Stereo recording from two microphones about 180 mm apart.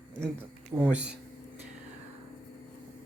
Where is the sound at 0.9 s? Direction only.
5° right (ahead or behind).